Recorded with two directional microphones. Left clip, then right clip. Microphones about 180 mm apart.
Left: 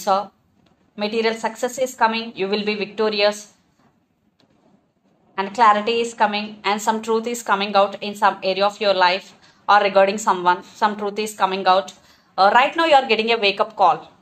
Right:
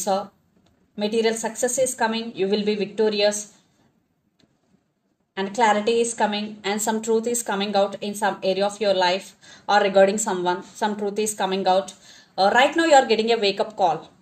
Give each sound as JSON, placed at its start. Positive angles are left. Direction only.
{"t": 0.9, "sound": "a woman's voice", "side_deg": -45}
{"t": 5.3, "sound": "a woman's voice", "side_deg": -45}